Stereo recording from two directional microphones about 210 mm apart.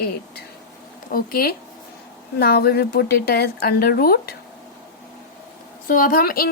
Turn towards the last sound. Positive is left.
turn(degrees=45)  # may be behind; listen again after turning